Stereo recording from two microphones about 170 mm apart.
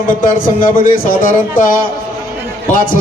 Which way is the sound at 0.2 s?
55° left (ahead or behind).